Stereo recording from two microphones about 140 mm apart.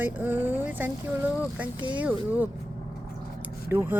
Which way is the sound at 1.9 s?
10° right (ahead or behind).